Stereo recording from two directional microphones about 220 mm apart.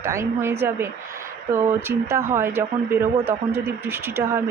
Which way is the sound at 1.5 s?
10° right (ahead or behind).